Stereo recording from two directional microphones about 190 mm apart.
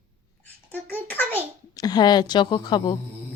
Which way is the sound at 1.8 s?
20° left (ahead or behind).